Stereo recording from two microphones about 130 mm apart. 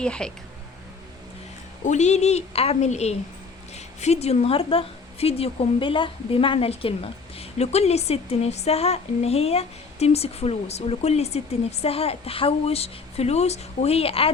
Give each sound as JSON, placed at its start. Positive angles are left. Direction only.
{"t": 0.0, "sound": "speech", "side_deg": 5}
{"t": 1.8, "sound": "a woman's voice", "side_deg": 65}